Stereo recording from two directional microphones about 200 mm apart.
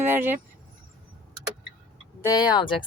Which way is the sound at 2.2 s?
20° left (ahead or behind).